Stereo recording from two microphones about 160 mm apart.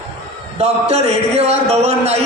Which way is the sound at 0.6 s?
40° right (ahead or behind).